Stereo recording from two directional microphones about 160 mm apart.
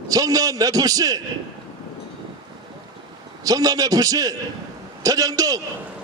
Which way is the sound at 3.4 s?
20° right (ahead or behind).